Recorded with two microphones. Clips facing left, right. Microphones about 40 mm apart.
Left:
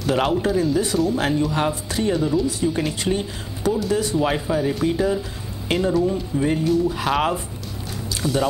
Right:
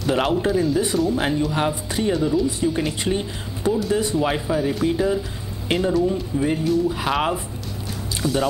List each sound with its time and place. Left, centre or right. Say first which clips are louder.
0.0 s speech: even; centre
3.0 s speech: even; centre